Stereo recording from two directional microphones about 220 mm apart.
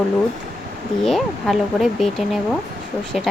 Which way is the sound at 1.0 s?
Centre (ahead or behind).